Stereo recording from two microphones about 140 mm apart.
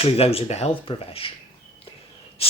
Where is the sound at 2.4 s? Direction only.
45° left (ahead or behind).